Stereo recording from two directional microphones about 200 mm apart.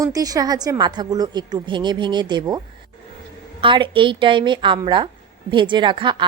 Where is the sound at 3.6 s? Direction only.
25° right (ahead or behind).